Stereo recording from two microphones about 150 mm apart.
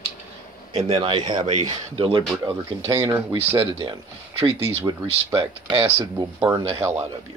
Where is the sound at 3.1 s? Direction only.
15° right (ahead or behind).